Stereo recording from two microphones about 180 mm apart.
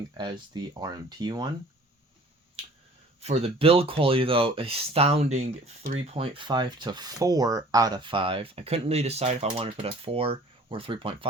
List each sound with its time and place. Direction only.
0.2 s speech: 25° right (ahead or behind)
3.2 s speech: 35° right (ahead or behind)